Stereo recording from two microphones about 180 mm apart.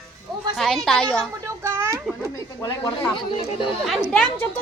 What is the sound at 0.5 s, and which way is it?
Speech, centre (ahead or behind).